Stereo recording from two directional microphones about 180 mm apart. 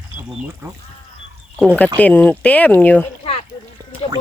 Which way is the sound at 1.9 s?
10° left (ahead or behind).